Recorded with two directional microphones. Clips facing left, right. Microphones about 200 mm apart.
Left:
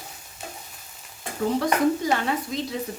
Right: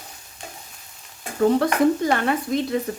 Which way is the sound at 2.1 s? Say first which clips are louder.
Right 4 dB; 55° right (ahead or behind).